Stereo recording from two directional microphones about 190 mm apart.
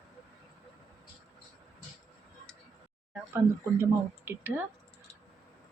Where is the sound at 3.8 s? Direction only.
10° right (ahead or behind).